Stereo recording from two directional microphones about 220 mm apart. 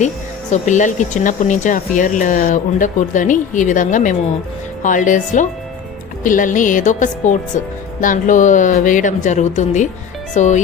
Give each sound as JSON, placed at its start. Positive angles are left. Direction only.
{"t": 0.5, "sound": "speech", "side_deg": 35}